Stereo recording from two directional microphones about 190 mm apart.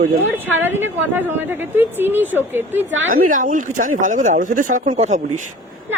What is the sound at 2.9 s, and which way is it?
Speech, 85° right.